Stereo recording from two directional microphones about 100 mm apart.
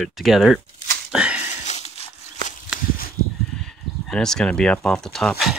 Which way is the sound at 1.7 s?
90° left.